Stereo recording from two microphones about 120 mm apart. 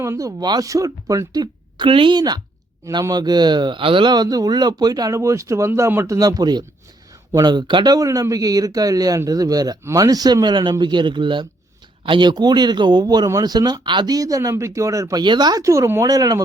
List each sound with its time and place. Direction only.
0.0 s speech: 25° right (ahead or behind)
1.9 s speech: 45° right (ahead or behind); by 6.1 s 20° right (ahead or behind)
6.1 s speech: 30° right (ahead or behind)